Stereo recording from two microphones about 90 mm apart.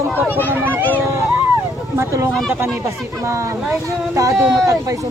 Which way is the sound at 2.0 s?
25° right (ahead or behind).